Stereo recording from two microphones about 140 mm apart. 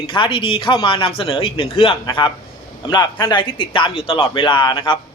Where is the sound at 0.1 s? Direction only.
35° left (ahead or behind).